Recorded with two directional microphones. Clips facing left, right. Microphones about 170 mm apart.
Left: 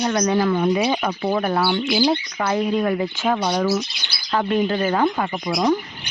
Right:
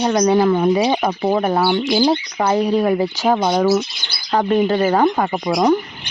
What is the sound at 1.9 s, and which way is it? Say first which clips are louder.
Speech: right 3 dB; 40° right (ahead or behind).